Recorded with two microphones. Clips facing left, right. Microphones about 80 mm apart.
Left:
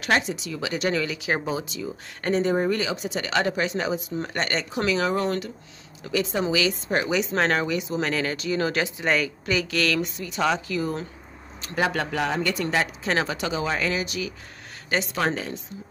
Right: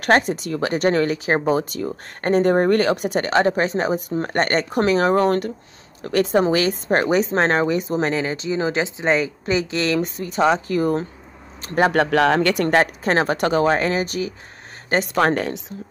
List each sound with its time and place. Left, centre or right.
0.0 s speech: right
8.1 s a woman's voice: right
10.0 s a woman's voice: right